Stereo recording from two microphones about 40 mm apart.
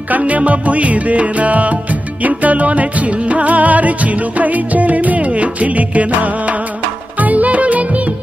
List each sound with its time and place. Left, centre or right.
0.2 s music: right